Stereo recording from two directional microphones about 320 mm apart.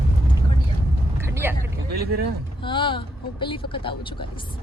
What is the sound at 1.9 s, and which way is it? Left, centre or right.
Vehicle, right.